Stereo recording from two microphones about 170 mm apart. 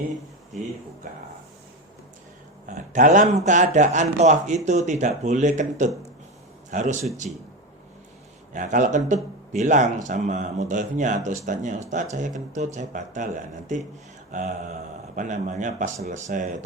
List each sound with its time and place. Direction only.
2.6 s speech: 45° right (ahead or behind)
8.5 s speech: 50° right (ahead or behind)